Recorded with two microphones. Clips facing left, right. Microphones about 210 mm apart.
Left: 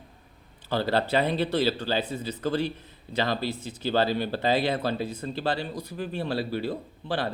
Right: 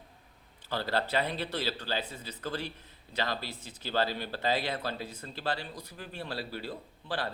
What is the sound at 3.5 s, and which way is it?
Speech, 75° left (ahead or behind).